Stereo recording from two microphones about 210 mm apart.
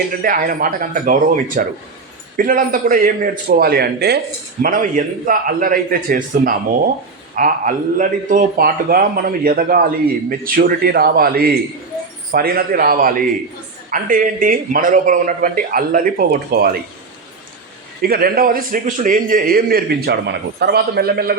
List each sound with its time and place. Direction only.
0.2 s a man's voice: 45° right (ahead or behind)
4.6 s a man's voice: 40° right (ahead or behind)
18.0 s a man's voice: 45° right (ahead or behind)